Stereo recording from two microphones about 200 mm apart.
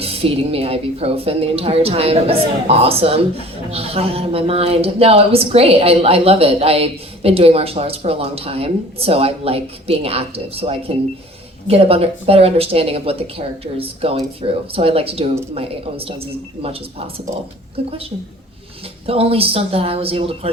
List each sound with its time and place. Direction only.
0.0 s speech: 30° right (ahead or behind)
17.8 s speech: 30° right (ahead or behind)
19.0 s speech: 30° right (ahead or behind)